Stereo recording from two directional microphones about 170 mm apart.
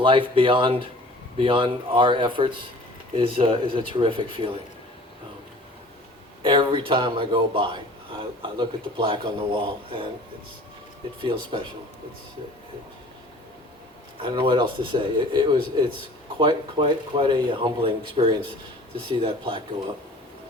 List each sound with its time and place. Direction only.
0.0 s speech: 30° right (ahead or behind)
6.4 s speech: 30° right (ahead or behind)
11.2 s speech: 30° right (ahead or behind)
14.2 s speech: 30° right (ahead or behind)